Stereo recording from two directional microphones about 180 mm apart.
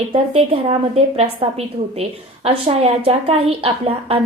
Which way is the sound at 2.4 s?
35° right (ahead or behind).